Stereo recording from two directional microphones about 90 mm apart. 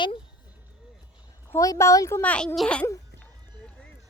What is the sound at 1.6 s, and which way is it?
Speech, 35° left (ahead or behind).